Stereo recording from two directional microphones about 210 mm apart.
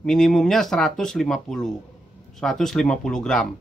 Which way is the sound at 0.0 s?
5° left (ahead or behind).